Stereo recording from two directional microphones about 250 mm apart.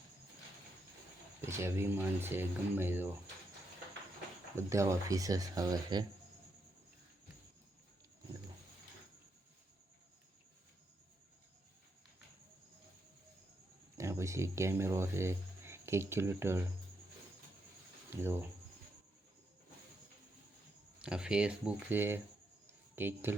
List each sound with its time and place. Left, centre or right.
1.4 s speech: centre
4.5 s speech: centre
13.9 s speech: centre
18.2 s speech: centre
21.0 s speech: centre
22.6 s a sound: centre